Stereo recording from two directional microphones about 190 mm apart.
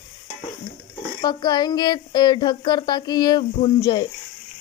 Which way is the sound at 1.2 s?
20° left (ahead or behind).